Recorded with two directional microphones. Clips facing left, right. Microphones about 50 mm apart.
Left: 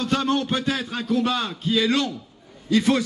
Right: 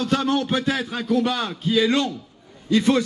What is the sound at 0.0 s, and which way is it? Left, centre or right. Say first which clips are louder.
A man's voice: right 1 dB; right.